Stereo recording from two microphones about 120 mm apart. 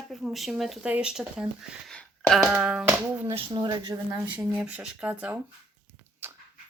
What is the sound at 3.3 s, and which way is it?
Speech, 40° right (ahead or behind).